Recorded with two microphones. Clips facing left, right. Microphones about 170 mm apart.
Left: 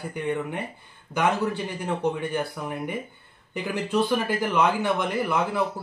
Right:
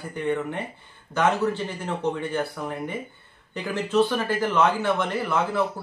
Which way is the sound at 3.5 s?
10° left (ahead or behind).